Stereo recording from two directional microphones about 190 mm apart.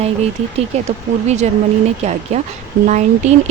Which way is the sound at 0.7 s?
35° right (ahead or behind).